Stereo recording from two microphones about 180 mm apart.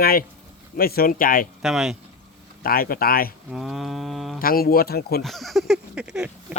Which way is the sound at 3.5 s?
Centre (ahead or behind).